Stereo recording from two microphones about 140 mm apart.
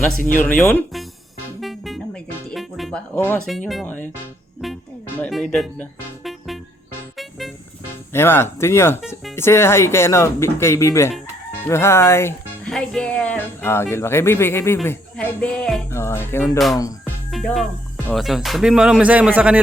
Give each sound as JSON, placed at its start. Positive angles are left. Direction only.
{"t": 0.3, "sound": "speech", "side_deg": 10}
{"t": 1.6, "sound": "music", "side_deg": 0}
{"t": 3.2, "sound": "speech", "side_deg": 15}
{"t": 4.6, "sound": "cricket", "side_deg": 0}
{"t": 7.2, "sound": "music", "side_deg": 0}
{"t": 8.1, "sound": "speech", "side_deg": 15}
{"t": 12.6, "sound": "speech", "side_deg": 5}
{"t": 15.9, "sound": "speech", "side_deg": 20}
{"t": 17.3, "sound": "cricket", "side_deg": 0}